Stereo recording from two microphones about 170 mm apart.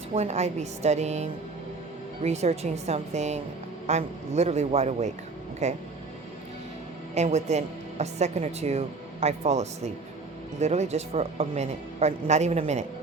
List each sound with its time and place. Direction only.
0.1 s a woman's voice: 40° right (ahead or behind)
7.1 s a woman's voice: 40° right (ahead or behind)